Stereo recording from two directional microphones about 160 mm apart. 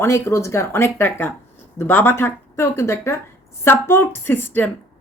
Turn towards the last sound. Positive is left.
turn(degrees=10)  # may be behind; listen again after turning